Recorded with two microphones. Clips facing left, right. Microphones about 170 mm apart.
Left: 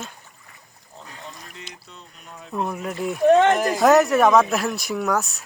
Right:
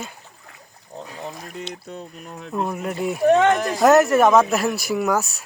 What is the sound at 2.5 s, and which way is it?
Speech, 5° right (ahead or behind).